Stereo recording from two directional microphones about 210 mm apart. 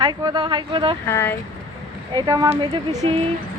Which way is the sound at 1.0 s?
10° left (ahead or behind).